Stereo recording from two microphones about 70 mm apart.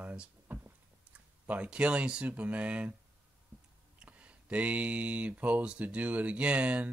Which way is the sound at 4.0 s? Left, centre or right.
Centre.